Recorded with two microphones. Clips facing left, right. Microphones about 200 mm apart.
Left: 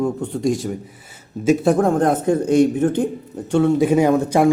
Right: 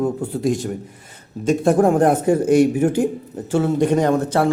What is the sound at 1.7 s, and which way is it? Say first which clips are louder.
A man's voice: right 2 dB; 10° right (ahead or behind).